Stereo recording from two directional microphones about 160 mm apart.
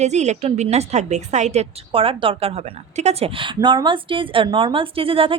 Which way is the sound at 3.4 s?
30° right (ahead or behind).